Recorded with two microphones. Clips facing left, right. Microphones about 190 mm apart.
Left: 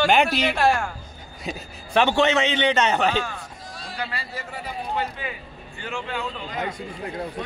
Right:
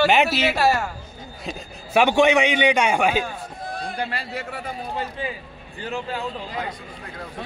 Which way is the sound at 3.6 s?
60° right (ahead or behind).